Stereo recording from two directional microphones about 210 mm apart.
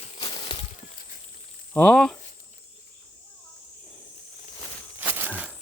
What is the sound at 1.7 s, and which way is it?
Speech, 5° left (ahead or behind).